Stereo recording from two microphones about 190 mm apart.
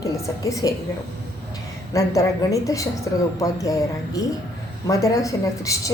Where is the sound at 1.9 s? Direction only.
15° left (ahead or behind).